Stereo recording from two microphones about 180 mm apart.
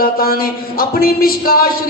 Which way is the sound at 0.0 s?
55° left (ahead or behind).